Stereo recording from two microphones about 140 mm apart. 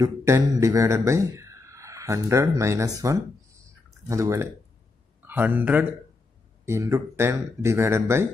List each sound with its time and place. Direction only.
0.0 s a man's voice: 25° right (ahead or behind)